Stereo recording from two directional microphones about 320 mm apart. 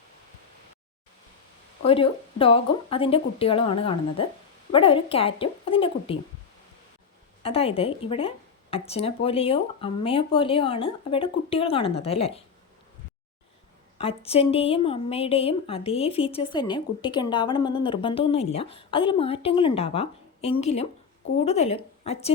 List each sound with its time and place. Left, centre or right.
1.8 s a woman's voice: centre
7.4 s a woman's voice: centre
14.0 s a woman's voice: centre